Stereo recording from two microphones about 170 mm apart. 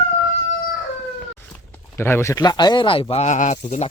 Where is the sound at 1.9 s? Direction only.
15° left (ahead or behind); by 3.0 s 30° left (ahead or behind).